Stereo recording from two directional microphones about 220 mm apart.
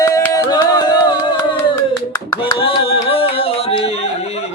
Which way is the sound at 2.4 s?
25° left (ahead or behind).